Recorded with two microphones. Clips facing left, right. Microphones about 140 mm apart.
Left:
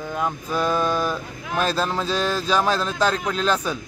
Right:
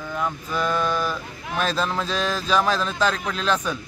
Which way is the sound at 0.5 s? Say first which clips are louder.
Left 2 dB; 5° left (ahead or behind).